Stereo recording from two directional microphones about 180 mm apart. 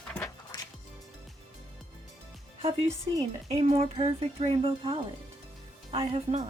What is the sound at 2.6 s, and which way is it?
Speech, 30° right (ahead or behind).